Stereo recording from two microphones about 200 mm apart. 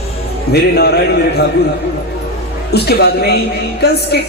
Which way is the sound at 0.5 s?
55° left (ahead or behind).